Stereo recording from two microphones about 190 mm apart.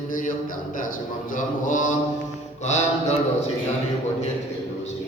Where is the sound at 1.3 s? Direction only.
40° left (ahead or behind).